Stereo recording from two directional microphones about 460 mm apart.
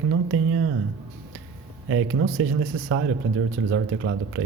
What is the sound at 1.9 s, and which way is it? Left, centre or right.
Speech, right.